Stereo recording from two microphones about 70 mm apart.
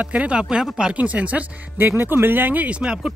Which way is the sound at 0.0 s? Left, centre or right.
Centre.